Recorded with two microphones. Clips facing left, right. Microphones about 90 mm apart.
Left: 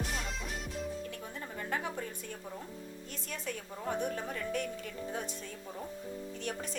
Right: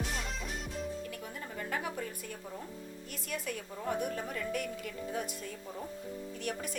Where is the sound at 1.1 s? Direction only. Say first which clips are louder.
Even; 30° left (ahead or behind).